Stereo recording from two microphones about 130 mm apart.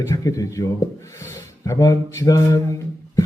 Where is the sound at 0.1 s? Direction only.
25° left (ahead or behind).